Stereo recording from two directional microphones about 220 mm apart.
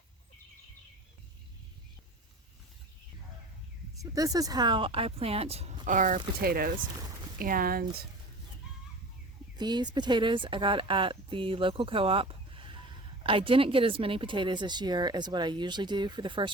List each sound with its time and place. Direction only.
3.9 s speech: 15° right (ahead or behind); by 8.0 s 45° right (ahead or behind)
9.6 s speech: 20° right (ahead or behind)